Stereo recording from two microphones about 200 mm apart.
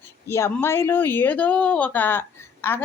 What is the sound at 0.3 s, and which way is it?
Speech, 15° left (ahead or behind).